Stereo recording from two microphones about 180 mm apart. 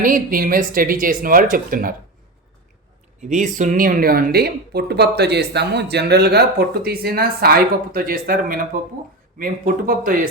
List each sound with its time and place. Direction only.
0.0 s speech: 50° right (ahead or behind)
3.2 s speech: 40° right (ahead or behind)